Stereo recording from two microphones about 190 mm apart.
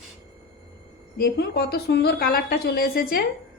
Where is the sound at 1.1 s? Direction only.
60° left (ahead or behind).